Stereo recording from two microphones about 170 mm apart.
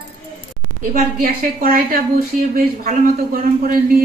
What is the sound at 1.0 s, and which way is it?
Speech, 60° right (ahead or behind).